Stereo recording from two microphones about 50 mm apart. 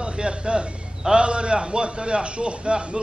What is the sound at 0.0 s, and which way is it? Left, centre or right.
A man's voice, centre.